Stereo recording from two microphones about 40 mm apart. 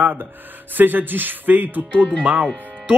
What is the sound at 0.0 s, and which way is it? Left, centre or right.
Speech, right.